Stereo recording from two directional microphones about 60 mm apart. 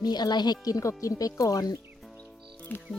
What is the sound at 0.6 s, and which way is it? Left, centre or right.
Speech, left.